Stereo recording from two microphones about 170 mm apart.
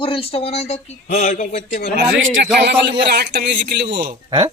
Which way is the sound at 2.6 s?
90° right.